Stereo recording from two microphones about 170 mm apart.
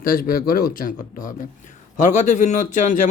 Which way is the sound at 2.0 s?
45° left (ahead or behind).